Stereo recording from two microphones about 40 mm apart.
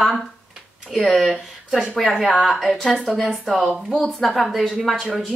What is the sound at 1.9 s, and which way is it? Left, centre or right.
A woman's voice, centre.